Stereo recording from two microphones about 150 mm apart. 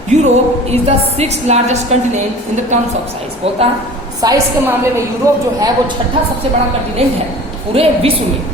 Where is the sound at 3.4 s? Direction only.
40° right (ahead or behind).